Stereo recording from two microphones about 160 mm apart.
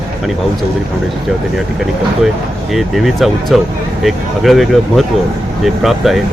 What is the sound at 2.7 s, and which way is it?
Speech, centre (ahead or behind).